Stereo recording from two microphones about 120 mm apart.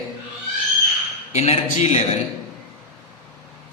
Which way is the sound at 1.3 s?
60° left (ahead or behind).